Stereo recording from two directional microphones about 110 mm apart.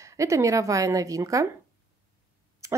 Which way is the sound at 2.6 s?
25° right (ahead or behind).